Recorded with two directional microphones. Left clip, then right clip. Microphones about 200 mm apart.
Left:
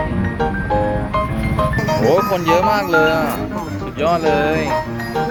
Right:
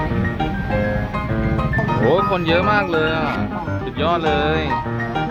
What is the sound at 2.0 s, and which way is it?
Speech, 5° right (ahead or behind).